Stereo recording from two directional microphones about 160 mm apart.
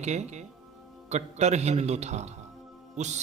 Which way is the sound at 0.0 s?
45° right (ahead or behind).